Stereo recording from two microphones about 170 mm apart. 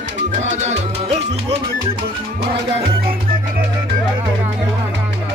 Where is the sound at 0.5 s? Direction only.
40° right (ahead or behind).